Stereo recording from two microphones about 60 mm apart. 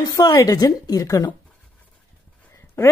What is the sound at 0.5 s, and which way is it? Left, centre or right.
Speech, left.